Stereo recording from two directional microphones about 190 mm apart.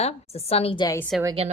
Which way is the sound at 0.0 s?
35° left (ahead or behind).